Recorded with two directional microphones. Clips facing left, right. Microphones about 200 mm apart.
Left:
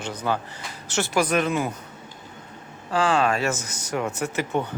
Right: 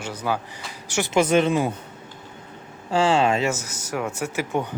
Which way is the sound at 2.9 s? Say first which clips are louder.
Right 2 dB; 25° right (ahead or behind).